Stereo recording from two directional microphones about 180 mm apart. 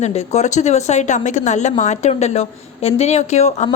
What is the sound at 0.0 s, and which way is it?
Speech, 35° left (ahead or behind).